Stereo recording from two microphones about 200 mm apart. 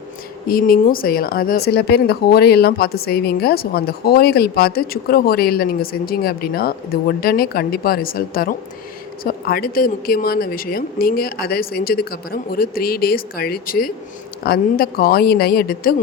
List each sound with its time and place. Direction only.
0.4 s speech: 45° left (ahead or behind)